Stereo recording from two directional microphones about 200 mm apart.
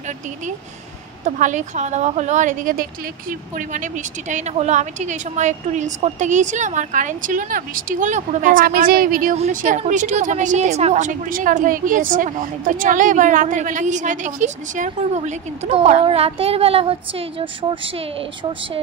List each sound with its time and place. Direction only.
1.2 s a woman's voice: 40° right (ahead or behind)